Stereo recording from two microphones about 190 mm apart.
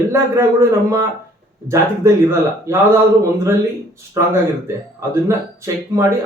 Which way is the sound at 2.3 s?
15° right (ahead or behind).